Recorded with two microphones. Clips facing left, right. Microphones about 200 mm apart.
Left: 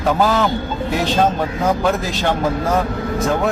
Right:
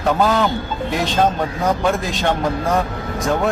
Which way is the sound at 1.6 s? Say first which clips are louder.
Left 1 dB; 5° left (ahead or behind).